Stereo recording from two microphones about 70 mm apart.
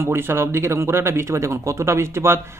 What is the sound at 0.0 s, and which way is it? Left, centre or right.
Speech, right.